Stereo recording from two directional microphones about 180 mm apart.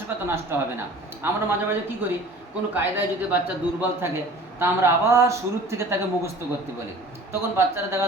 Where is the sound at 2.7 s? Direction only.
10° right (ahead or behind).